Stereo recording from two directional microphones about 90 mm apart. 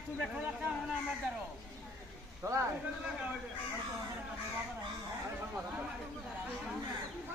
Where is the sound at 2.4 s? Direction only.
35° right (ahead or behind).